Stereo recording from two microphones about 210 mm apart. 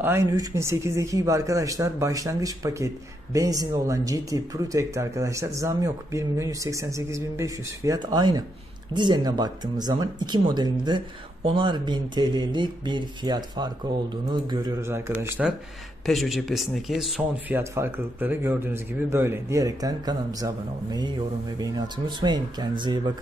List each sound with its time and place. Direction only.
0.0 s speech: 10° right (ahead or behind)